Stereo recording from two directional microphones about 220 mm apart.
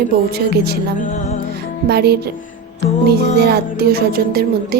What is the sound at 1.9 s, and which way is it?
Music, 45° right (ahead or behind).